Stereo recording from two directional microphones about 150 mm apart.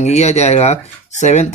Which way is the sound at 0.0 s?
45° left (ahead or behind).